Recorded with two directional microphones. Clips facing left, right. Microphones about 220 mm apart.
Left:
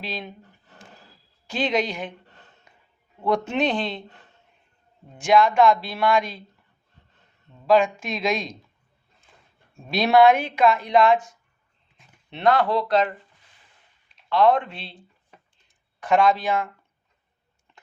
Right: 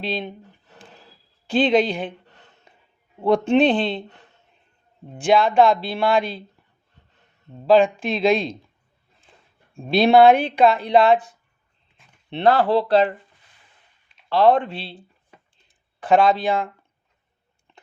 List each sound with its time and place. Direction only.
0.0 s speech: 30° right (ahead or behind)
1.5 s speech: 30° right (ahead or behind)
3.2 s speech: 30° right (ahead or behind)
5.1 s speech: 30° right (ahead or behind)
7.5 s speech: 35° right (ahead or behind)
9.7 s speech: 30° right (ahead or behind)
14.3 s speech: 35° right (ahead or behind)